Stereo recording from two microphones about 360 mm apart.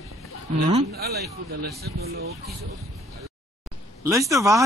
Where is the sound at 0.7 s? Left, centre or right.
Right.